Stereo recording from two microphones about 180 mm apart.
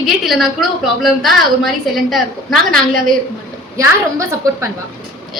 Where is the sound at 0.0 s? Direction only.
Centre (ahead or behind).